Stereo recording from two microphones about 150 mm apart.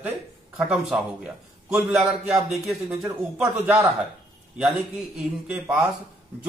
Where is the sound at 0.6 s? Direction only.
Centre (ahead or behind).